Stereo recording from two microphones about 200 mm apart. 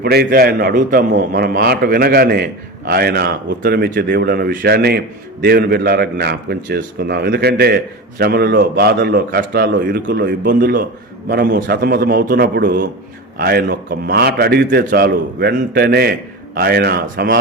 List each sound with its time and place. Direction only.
0.0 s a man's voice: 50° right (ahead or behind)